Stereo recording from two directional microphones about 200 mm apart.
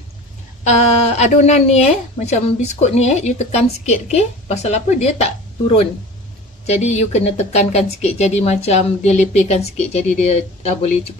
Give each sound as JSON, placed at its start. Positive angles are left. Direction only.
{"t": 0.7, "sound": "a woman's voice", "side_deg": 35}
{"t": 6.6, "sound": "a woman's voice", "side_deg": 35}